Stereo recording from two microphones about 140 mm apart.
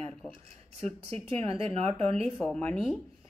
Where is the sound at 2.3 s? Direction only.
5° left (ahead or behind).